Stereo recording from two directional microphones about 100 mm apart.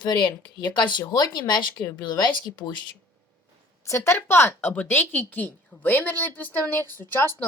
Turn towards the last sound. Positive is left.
turn(degrees=20)  # may be behind; listen again after turning